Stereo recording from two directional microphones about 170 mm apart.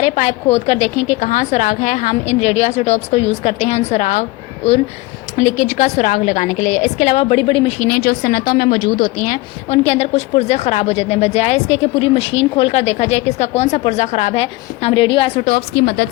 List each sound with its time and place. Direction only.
0.0 s a woman's voice: 40° left (ahead or behind)
7.8 s a woman's voice: 60° left (ahead or behind)
9.7 s a woman's voice: 35° left (ahead or behind)
15.4 s speech: 65° left (ahead or behind)